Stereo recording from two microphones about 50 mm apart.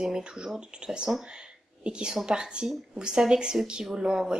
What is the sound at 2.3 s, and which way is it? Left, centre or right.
Speech, centre.